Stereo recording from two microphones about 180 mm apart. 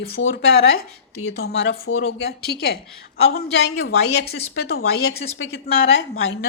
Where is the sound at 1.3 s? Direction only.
60° left (ahead or behind).